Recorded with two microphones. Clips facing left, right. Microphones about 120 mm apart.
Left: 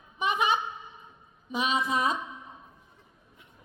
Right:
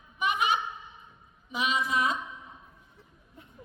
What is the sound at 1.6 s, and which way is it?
Music, 25° left (ahead or behind).